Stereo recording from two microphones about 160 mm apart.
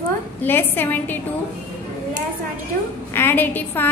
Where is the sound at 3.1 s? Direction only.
15° left (ahead or behind).